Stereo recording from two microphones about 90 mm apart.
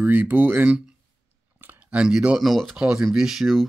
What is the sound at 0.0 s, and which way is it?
Speech, 20° right (ahead or behind).